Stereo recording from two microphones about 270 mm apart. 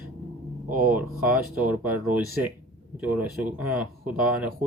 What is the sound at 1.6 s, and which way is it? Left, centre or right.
Speech, centre.